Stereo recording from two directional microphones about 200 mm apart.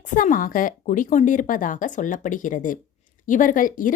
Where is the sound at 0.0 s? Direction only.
40° left (ahead or behind).